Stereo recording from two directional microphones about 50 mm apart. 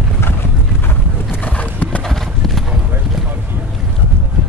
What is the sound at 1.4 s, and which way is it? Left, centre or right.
Horse, left.